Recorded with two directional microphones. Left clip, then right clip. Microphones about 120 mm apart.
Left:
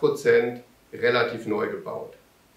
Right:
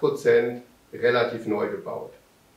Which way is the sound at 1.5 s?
20° left (ahead or behind).